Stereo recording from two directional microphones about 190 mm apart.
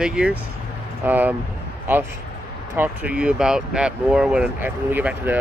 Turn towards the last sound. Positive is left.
turn(degrees=-10)  # may be behind; listen again after turning